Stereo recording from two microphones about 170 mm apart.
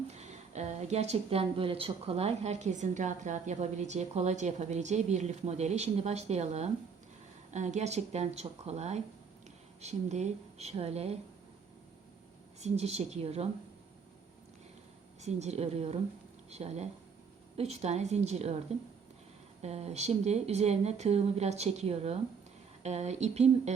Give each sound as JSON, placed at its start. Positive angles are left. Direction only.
{"t": 0.2, "sound": "a woman's voice", "side_deg": -40}
{"t": 12.5, "sound": "a woman's voice", "side_deg": -40}
{"t": 15.2, "sound": "a woman's voice", "side_deg": -40}
{"t": 19.6, "sound": "a woman's voice", "side_deg": -40}